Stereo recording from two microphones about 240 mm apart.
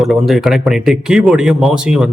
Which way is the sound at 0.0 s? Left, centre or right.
Centre.